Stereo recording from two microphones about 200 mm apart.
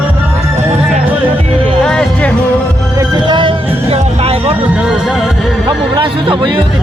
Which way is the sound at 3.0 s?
25° right (ahead or behind).